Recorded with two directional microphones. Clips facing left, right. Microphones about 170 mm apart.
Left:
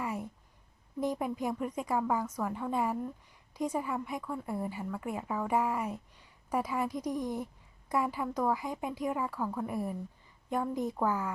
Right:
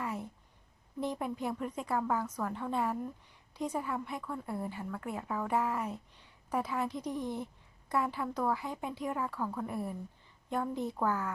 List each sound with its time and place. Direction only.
0.0 s a sound: 10° left (ahead or behind)
1.0 s a woman's voice: 5° left (ahead or behind)
6.9 s speech: 40° left (ahead or behind)
7.2 s a woman's voice: 10° left (ahead or behind)